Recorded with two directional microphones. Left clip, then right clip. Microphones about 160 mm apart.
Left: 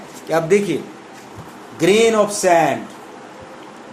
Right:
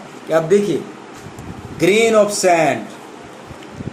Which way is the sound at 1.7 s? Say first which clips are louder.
Right 1 dB; 35° left (ahead or behind).